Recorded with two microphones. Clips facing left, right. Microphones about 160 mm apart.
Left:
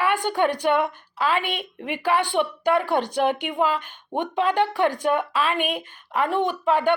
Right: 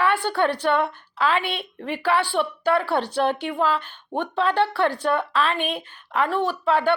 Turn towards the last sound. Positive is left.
turn(degrees=15)  # may be behind; listen again after turning